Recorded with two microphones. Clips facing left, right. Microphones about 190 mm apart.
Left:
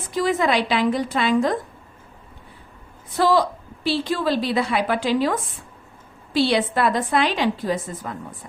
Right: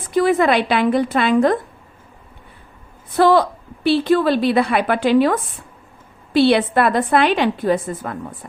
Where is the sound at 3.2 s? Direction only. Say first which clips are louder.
Right 5 dB; 60° right (ahead or behind).